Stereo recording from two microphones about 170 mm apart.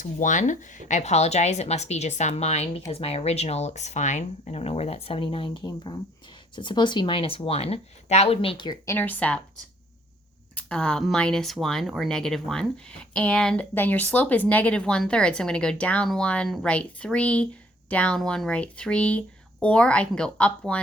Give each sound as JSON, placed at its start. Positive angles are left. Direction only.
{"t": 0.0, "sound": "speech", "side_deg": 50}
{"t": 9.0, "sound": "speech", "side_deg": 10}
{"t": 10.5, "sound": "speech", "side_deg": 5}